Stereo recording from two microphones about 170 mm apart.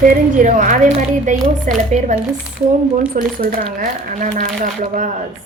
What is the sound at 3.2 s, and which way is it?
Speech, 55° right (ahead or behind).